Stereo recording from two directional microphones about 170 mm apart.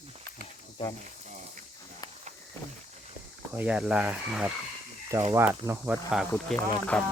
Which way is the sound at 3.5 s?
10° right (ahead or behind).